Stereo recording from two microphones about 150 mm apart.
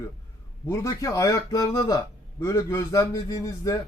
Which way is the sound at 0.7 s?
20° left (ahead or behind).